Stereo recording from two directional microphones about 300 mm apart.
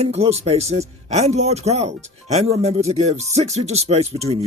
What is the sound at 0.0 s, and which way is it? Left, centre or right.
Speech, centre.